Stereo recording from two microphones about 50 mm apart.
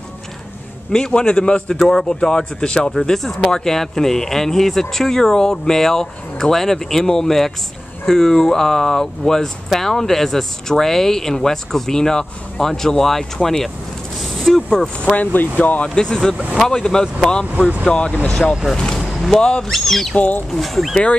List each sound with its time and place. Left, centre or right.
0.9 s speech: centre
1.8 s speech: centre
15.1 s speech: left
15.9 s speech: centre
18.5 s speech: centre
18.9 s a sound: centre
19.7 s speech: centre
20.2 s speech: left
20.5 s speech: centre